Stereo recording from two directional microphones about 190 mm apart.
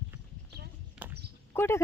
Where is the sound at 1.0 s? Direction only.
5° right (ahead or behind).